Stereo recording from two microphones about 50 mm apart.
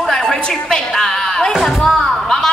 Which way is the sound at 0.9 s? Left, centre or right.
Centre.